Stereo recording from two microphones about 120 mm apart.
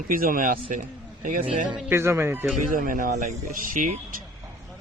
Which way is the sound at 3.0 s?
90° right.